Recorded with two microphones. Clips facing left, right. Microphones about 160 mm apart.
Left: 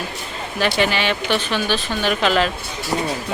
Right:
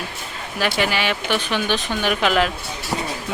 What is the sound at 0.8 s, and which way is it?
Speech, 10° right (ahead or behind).